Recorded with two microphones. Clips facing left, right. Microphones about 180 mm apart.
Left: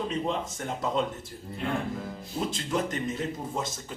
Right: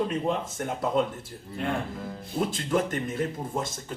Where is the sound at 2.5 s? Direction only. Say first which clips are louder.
Right 3 dB; 55° right (ahead or behind).